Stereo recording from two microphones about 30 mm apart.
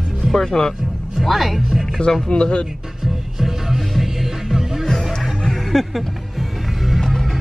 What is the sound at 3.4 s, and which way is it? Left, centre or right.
Music, centre.